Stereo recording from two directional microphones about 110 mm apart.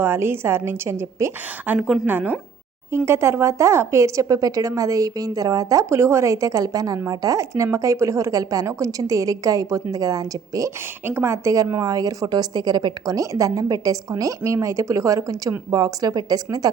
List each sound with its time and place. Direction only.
0.0 s a woman's voice: 20° right (ahead or behind)